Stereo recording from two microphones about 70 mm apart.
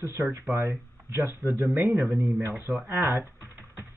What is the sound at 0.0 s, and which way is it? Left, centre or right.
Speech, right.